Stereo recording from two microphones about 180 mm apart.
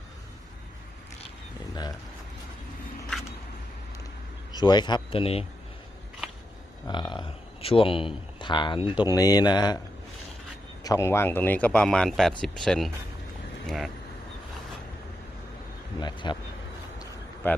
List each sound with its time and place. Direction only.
4.5 s speech: 25° left (ahead or behind)
6.8 s speech: 25° left (ahead or behind)
10.8 s speech: 15° left (ahead or behind); by 13.9 s centre (ahead or behind)
16.0 s speech: 25° left (ahead or behind)
17.4 s speech: 10° left (ahead or behind)